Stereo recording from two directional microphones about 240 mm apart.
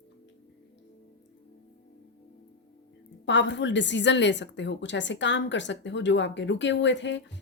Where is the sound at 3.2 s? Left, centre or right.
Left.